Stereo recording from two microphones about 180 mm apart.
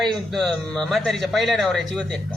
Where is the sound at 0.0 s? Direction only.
Centre (ahead or behind).